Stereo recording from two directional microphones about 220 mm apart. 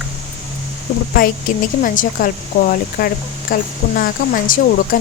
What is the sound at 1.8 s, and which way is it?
Speech, 35° left (ahead or behind).